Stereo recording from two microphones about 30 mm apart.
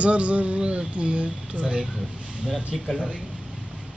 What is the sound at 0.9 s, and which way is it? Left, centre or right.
Speech, right.